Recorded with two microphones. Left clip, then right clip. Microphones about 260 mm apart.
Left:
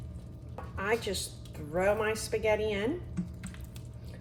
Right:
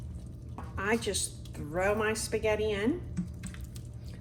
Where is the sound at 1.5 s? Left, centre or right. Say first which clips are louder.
Left 1 dB; right.